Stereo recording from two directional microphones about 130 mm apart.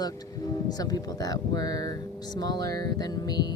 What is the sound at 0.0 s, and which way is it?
Speech, 30° left (ahead or behind).